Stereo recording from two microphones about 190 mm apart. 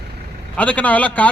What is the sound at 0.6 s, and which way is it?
Speech, 10° left (ahead or behind).